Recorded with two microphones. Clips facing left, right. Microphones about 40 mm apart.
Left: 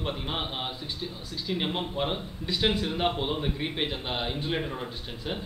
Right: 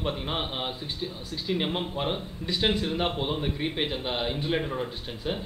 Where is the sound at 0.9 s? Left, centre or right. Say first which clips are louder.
Right 2 dB; right.